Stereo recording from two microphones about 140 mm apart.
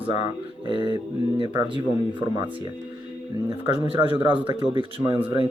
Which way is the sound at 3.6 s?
40° right (ahead or behind).